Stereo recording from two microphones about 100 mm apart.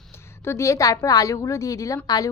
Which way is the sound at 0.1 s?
25° left (ahead or behind).